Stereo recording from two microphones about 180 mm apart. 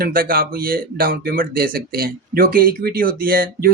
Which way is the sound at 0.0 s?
55° right (ahead or behind).